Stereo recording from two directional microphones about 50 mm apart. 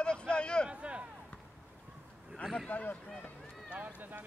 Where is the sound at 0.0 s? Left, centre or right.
Centre.